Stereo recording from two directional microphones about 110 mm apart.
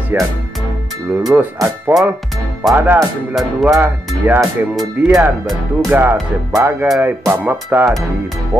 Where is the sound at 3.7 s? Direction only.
20° right (ahead or behind).